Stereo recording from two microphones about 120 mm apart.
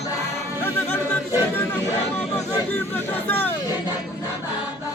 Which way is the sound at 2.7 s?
15° left (ahead or behind).